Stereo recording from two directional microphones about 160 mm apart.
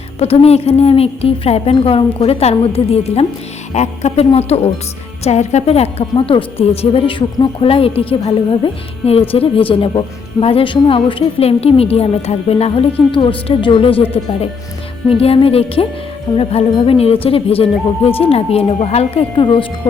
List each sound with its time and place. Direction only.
0.2 s a woman's voice: 40° left (ahead or behind)
15.2 s a woman's voice: 35° left (ahead or behind)